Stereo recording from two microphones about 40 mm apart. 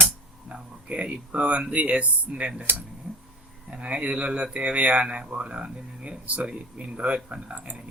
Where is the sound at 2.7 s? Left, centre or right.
Right.